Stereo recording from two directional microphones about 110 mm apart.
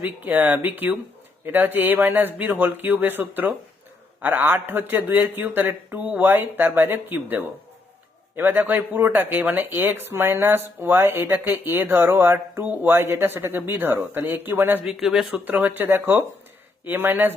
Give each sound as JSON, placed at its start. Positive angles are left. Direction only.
{"t": 0.0, "sound": "a man's voice", "side_deg": -15}
{"t": 14.8, "sound": "speech", "side_deg": -5}
{"t": 15.4, "sound": "a man's voice", "side_deg": -15}